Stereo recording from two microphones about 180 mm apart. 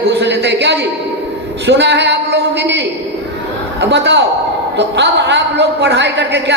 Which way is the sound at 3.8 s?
70° right (ahead or behind).